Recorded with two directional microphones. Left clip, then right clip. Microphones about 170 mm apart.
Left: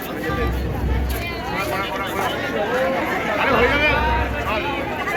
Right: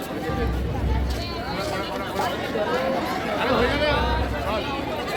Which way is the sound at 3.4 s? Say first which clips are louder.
Left 5 dB; 30° right (ahead or behind).